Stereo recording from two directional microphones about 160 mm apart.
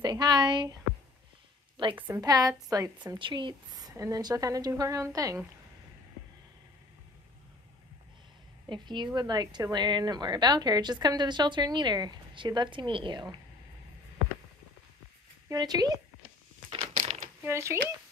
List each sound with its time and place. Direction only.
0.0 s a woman's voice: 25° right (ahead or behind)
2.0 s a woman's voice: 10° right (ahead or behind)
2.2 s a woman's voice: 25° right (ahead or behind)
8.6 s a woman's voice: 30° right (ahead or behind)
15.4 s speech: 25° right (ahead or behind)
16.7 s crushing: 40° right (ahead or behind)
17.4 s speech: 15° right (ahead or behind)